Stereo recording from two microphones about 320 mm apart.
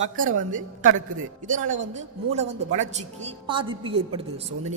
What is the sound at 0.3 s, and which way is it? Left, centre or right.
A man's voice, right.